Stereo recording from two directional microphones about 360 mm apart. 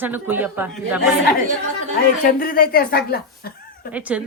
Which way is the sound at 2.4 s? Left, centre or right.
Left.